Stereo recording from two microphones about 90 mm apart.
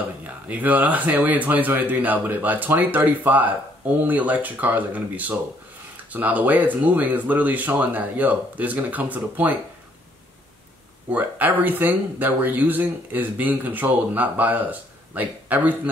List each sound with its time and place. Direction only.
0.5 s speech: 20° right (ahead or behind)
11.1 s speech: 20° right (ahead or behind)